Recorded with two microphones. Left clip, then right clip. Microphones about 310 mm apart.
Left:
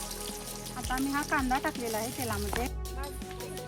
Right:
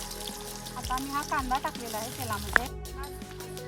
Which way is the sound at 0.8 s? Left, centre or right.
Right.